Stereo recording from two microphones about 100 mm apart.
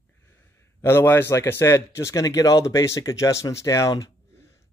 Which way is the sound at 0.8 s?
25° left (ahead or behind).